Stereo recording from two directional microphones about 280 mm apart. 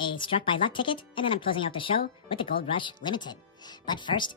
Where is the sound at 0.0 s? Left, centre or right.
Centre.